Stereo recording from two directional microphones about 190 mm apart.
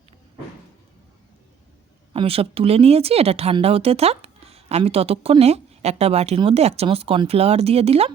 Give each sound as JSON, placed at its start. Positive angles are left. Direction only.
{"t": 2.1, "sound": "speech", "side_deg": -30}